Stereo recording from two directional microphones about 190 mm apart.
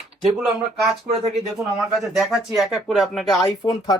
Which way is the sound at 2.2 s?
Centre (ahead or behind).